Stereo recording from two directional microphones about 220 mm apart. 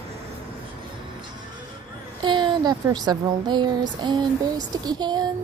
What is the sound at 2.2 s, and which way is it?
Speech, 20° right (ahead or behind).